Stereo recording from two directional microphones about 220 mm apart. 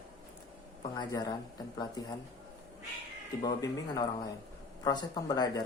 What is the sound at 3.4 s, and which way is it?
Speech, 20° left (ahead or behind).